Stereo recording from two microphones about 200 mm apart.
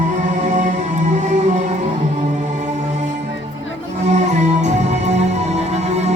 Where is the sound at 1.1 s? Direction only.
35° right (ahead or behind).